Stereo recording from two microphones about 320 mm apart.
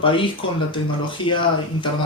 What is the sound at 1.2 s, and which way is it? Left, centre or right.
Speech, centre.